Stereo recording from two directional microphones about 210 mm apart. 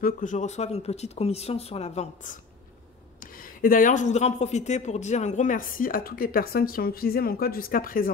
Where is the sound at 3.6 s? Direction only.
40° left (ahead or behind).